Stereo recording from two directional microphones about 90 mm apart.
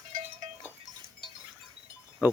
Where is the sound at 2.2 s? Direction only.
20° right (ahead or behind).